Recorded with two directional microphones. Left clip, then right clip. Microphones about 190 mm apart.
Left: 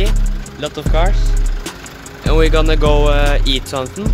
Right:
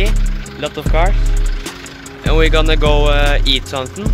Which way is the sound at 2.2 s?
Centre (ahead or behind).